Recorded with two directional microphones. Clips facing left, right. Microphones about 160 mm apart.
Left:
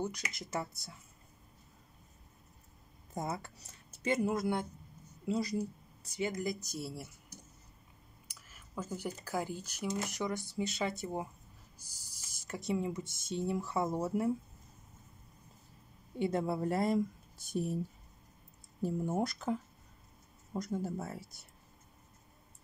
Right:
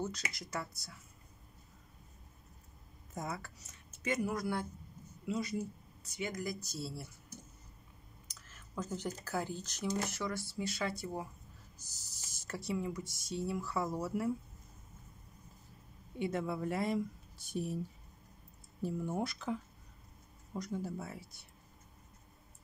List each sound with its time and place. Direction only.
0.0 s speech: 15° left (ahead or behind)
0.5 s speech: 25° left (ahead or behind)
3.2 s speech: 25° left (ahead or behind)
5.2 s speech: 35° left (ahead or behind); by 7.1 s 15° left (ahead or behind)
8.3 s speech: 10° left (ahead or behind); by 14.3 s 25° left (ahead or behind)
16.2 s speech: 35° left (ahead or behind)
18.8 s speech: 45° left (ahead or behind)